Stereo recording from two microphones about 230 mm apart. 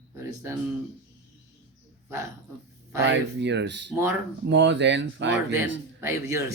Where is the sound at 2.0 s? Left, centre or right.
Centre.